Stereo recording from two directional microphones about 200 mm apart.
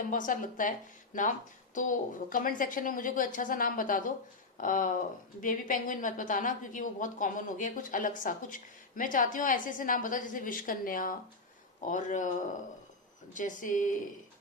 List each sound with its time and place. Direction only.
0.1 s a woman's voice: 40° left (ahead or behind)
1.7 s a woman's voice: 40° left (ahead or behind)
13.3 s a woman's voice: 40° left (ahead or behind)